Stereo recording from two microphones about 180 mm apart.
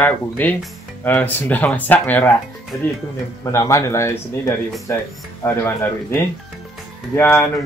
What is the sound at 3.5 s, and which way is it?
Speech, 15° left (ahead or behind).